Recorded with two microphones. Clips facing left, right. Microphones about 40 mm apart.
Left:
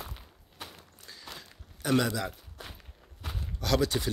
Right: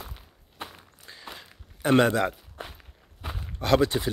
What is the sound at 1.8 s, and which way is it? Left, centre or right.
Speech, right.